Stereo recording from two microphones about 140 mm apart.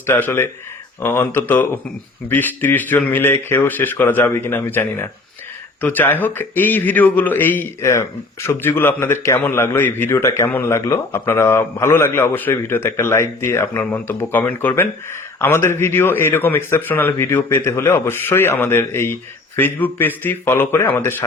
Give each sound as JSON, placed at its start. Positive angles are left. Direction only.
{"t": 0.0, "sound": "a man's voice", "side_deg": 15}